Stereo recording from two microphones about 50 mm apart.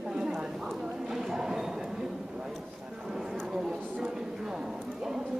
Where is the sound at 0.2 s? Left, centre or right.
Right.